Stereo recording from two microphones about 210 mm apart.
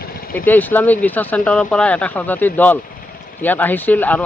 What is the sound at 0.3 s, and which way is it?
Speech, 10° left (ahead or behind).